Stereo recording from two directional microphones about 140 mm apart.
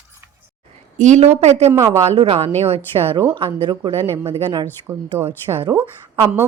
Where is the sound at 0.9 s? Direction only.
60° right (ahead or behind).